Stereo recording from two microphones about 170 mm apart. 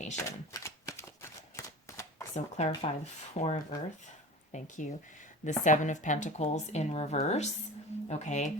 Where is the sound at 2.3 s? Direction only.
40° left (ahead or behind).